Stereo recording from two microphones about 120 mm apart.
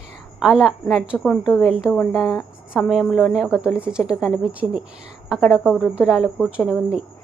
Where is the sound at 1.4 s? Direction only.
10° left (ahead or behind).